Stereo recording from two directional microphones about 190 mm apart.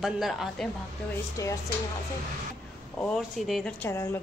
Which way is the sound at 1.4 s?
15° left (ahead or behind).